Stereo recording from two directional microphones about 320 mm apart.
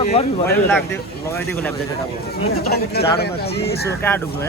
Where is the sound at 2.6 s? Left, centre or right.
Left.